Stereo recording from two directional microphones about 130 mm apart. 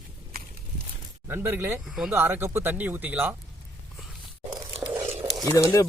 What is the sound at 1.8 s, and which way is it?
Speech, centre (ahead or behind).